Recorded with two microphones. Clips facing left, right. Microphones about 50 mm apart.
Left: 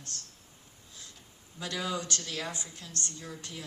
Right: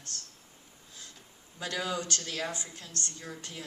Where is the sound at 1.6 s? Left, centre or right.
Right.